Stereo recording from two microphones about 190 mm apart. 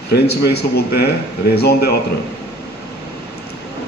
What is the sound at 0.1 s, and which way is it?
A man's voice, 55° left (ahead or behind).